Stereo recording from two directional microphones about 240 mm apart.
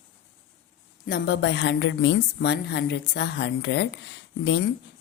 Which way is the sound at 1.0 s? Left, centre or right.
Left.